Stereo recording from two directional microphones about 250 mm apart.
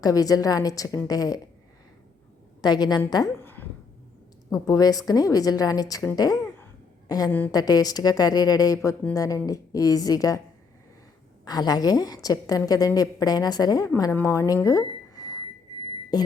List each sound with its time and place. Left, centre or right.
0.0 s a woman's voice: centre
2.6 s a woman's voice: centre
11.4 s a woman's voice: centre